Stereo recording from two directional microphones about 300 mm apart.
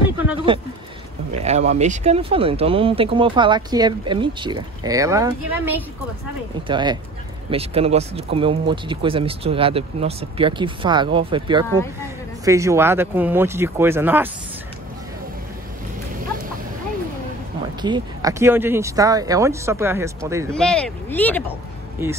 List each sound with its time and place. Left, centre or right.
0.5 s speech: centre
17.8 s speech: centre
20.5 s speech: centre